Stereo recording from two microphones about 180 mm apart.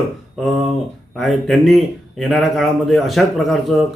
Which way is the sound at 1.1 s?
Centre (ahead or behind).